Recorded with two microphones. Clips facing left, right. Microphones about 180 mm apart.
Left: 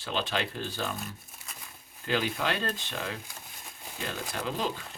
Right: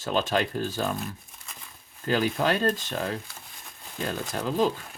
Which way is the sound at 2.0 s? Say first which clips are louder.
Right 5 dB; 45° right (ahead or behind).